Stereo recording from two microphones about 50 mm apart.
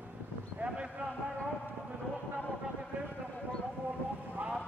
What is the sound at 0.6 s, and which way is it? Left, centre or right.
Basketball bounce, right.